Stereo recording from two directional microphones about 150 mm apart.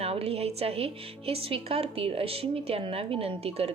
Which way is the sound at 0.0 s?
40° right (ahead or behind).